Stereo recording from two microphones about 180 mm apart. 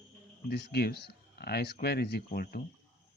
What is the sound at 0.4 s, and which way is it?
Speech, 65° left (ahead or behind).